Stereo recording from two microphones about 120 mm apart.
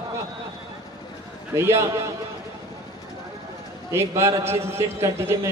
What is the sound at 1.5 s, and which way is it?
Speech, 20° right (ahead or behind).